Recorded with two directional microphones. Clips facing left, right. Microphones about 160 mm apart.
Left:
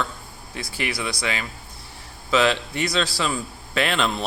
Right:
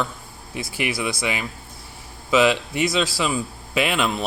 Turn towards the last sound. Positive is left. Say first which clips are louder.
# right 1 dB
turn(degrees=-10)  # may be behind; listen again after turning